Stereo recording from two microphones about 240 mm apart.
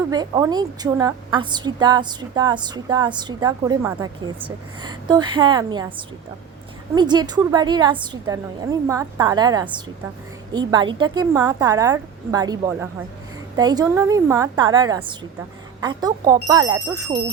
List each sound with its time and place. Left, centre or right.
0.1 s a woman's voice: centre